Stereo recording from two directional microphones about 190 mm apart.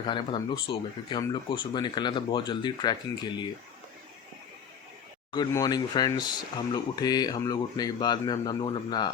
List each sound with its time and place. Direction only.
0.1 s speech: 25° left (ahead or behind)
5.3 s speech: 20° left (ahead or behind)